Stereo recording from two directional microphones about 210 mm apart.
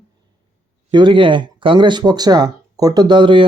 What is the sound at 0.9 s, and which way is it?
Speech, 20° right (ahead or behind).